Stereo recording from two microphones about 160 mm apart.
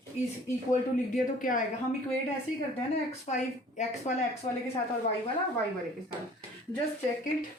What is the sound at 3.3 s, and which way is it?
Speech, 45° left (ahead or behind).